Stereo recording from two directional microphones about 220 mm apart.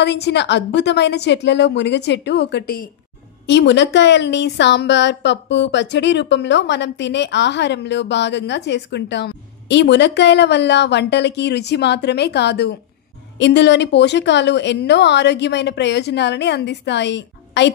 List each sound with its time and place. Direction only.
0.0 s a woman's voice: 50° left (ahead or behind)
3.4 s a woman's voice: 55° left (ahead or behind)